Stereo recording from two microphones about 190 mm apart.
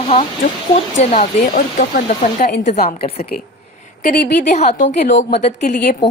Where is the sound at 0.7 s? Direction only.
35° left (ahead or behind).